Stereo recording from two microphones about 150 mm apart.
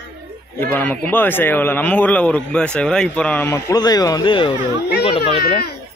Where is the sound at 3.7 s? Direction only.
25° left (ahead or behind).